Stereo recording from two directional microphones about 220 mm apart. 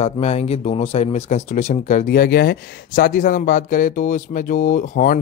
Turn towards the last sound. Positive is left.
turn(degrees=35)  # may be behind; listen again after turning